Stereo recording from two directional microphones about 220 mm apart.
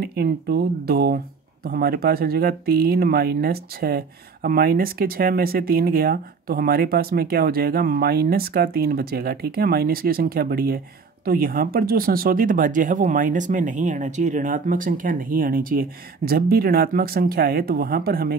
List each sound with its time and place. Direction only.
0.0 s speech: 45° right (ahead or behind)